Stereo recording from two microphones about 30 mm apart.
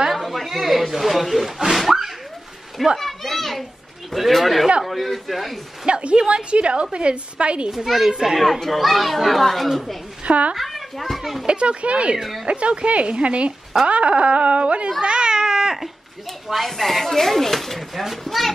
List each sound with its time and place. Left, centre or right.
0.1 s a sound: centre
0.5 s speech: centre
1.7 s a sound: centre
3.0 s a child's voice: centre
5.9 s a woman's voice: right
7.7 s a child's voice: centre
10.2 s speech: right
10.5 s a child's voice: centre
11.4 s a woman's voice: right
12.2 s speech: centre
12.4 s a woman's voice: right
15.0 s cat: right
16.5 s speech: centre